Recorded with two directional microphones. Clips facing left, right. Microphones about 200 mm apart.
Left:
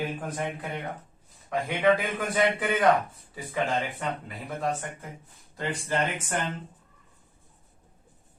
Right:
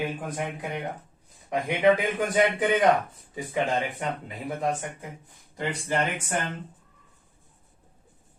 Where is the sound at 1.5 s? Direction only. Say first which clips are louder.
Right 2 dB; 20° right (ahead or behind).